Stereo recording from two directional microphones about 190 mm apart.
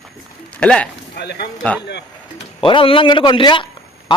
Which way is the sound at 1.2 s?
60° left (ahead or behind).